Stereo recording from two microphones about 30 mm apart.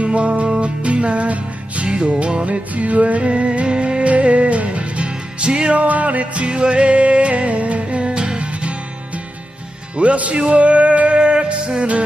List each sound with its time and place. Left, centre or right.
0.0 s music: right
1.9 s music: right
3.3 s music: right
4.0 s music: right
5.7 s music: right
11.1 s music: right